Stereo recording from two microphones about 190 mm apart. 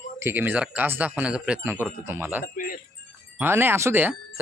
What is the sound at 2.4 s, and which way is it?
Speech, 45° left (ahead or behind).